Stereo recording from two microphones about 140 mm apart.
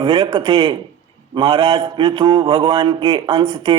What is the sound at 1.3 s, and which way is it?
Speech, 40° right (ahead or behind).